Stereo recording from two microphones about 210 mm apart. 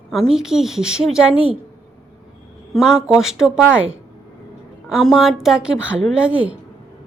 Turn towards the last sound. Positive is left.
turn(degrees=-5)  # may be behind; listen again after turning